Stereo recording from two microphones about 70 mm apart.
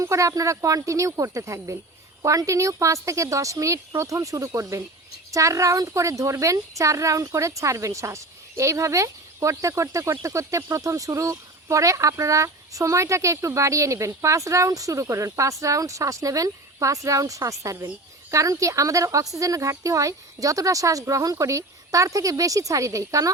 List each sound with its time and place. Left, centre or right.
0.0 s a woman's voice: right